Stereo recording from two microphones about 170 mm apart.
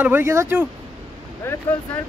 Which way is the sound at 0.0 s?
15° right (ahead or behind).